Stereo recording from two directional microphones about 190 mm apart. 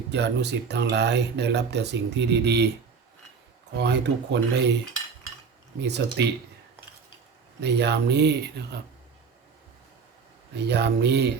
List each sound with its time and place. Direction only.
0.1 s speech: 65° right (ahead or behind)
3.8 s speech: 65° right (ahead or behind)
6.2 s speech: 65° right (ahead or behind)
7.6 s speech: 65° right (ahead or behind)
10.5 s speech: 60° right (ahead or behind)